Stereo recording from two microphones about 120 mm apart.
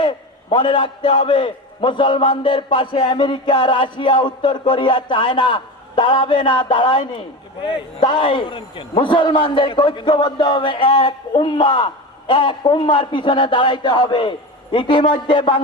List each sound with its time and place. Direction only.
0.5 s a man's voice: 45° left (ahead or behind)